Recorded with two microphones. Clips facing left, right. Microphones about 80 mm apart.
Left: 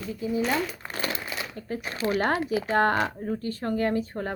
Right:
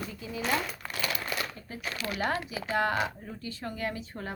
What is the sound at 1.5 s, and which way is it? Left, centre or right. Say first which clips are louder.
Speech: left 10 dB; left.